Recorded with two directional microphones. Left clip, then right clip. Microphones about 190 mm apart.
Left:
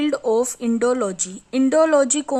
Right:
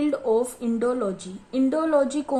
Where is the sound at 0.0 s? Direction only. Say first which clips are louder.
Left 3 dB; 30° left (ahead or behind).